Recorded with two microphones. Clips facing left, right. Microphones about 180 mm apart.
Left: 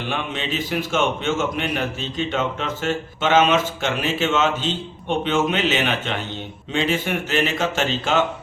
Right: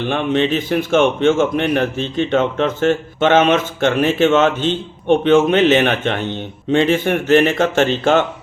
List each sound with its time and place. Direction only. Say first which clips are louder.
0.1 s a man's voice: right 11 dB; 55° right (ahead or behind)